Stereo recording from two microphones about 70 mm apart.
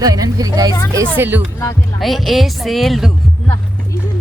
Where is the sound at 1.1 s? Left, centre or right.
Right.